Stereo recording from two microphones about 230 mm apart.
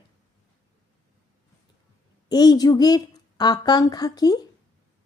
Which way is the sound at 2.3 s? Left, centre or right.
Centre.